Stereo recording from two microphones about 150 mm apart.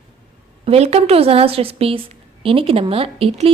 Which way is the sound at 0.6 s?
40° right (ahead or behind).